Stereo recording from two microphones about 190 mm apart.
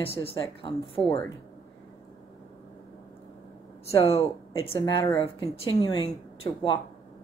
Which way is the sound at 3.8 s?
30° left (ahead or behind).